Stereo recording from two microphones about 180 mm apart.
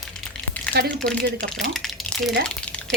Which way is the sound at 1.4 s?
Centre (ahead or behind).